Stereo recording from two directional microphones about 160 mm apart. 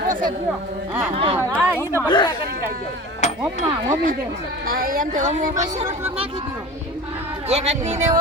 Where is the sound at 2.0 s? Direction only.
30° left (ahead or behind).